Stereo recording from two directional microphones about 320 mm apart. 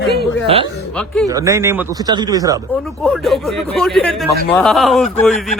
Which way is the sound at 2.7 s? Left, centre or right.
Centre.